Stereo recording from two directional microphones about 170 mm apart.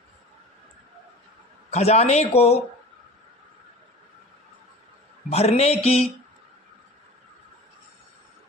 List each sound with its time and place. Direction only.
1.7 s speech: 40° left (ahead or behind)
5.3 s speech: 35° left (ahead or behind)